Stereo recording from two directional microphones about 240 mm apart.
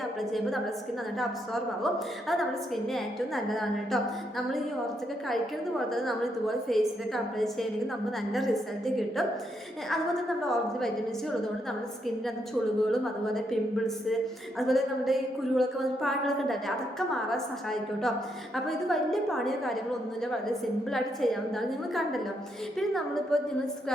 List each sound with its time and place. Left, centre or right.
0.2 s a woman's voice: centre
1.8 s a woman's voice: centre
5.9 s a woman's voice: centre
12.9 s a woman's voice: centre